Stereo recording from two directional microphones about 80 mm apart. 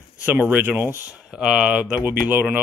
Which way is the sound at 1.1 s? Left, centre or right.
Centre.